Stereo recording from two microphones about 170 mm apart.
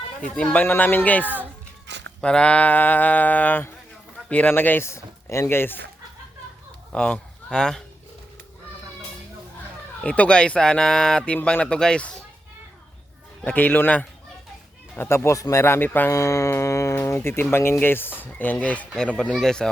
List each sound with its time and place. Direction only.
0.2 s speech: 10° left (ahead or behind)
1.9 s a sound: 90° right
2.2 s speech: 5° left (ahead or behind)
6.9 s speech: 5° left (ahead or behind)
10.0 s speech: 5° left (ahead or behind)
13.4 s speech: 10° left (ahead or behind)